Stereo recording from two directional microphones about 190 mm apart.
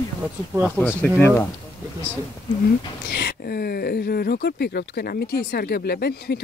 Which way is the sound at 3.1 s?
60° left (ahead or behind).